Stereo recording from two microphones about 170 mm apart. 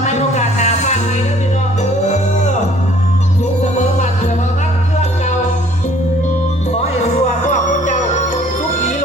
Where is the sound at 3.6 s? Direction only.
45° left (ahead or behind).